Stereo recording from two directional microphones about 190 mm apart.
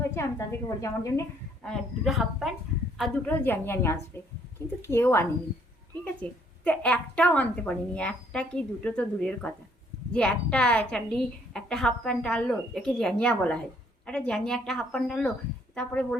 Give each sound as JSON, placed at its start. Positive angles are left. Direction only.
{"t": 0.0, "sound": "a woman's voice", "side_deg": 15}
{"t": 1.6, "sound": "a woman's voice", "side_deg": 0}
{"t": 3.0, "sound": "a woman's voice", "side_deg": 10}
{"t": 5.9, "sound": "a sound", "side_deg": 10}
{"t": 6.7, "sound": "a woman's voice", "side_deg": 5}